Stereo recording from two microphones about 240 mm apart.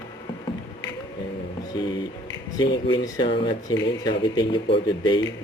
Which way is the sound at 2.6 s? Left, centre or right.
Centre.